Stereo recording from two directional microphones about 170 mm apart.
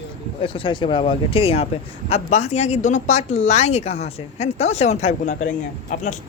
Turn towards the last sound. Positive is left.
turn(degrees=50)  # may be behind; listen again after turning